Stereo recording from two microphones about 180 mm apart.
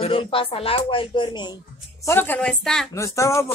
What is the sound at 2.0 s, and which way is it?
Speech, 10° left (ahead or behind).